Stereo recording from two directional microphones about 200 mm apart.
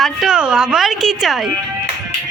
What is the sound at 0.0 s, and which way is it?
Speech, centre (ahead or behind).